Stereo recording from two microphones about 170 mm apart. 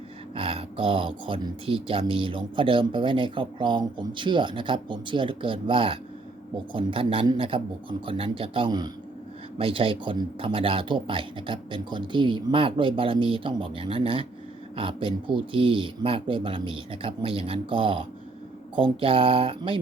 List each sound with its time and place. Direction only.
0.3 s speech: 30° right (ahead or behind)